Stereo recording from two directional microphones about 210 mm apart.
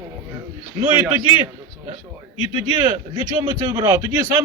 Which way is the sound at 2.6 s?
20° right (ahead or behind).